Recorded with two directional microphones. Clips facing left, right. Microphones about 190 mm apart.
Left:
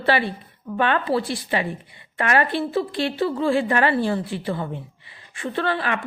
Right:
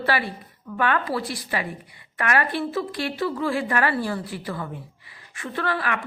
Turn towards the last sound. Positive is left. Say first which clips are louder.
# left 3 dB
turn(degrees=25)  # may be behind; listen again after turning